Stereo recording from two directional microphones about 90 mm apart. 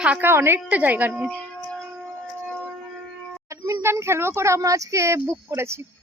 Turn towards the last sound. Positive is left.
turn(degrees=-30)  # may be behind; listen again after turning